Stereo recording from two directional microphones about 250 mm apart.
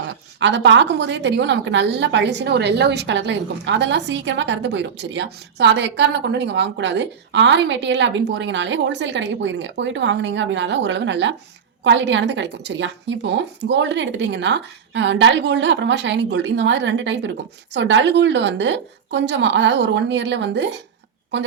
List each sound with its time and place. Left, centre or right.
0.1 s a woman's voice: right